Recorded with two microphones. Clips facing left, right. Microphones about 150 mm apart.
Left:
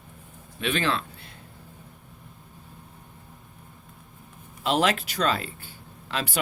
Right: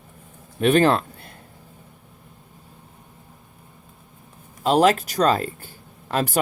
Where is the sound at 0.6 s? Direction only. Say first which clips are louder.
Right 10 dB; 45° right (ahead or behind).